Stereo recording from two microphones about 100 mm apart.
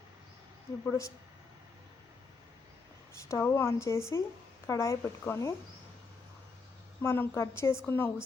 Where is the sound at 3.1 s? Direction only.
30° left (ahead or behind).